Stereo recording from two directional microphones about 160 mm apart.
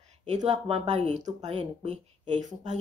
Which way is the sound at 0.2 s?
45° right (ahead or behind).